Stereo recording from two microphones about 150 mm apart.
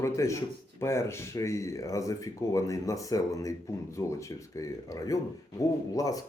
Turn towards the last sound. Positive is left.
turn(degrees=25)  # may be behind; listen again after turning